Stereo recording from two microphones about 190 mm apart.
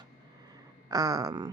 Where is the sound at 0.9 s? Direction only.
20° right (ahead or behind).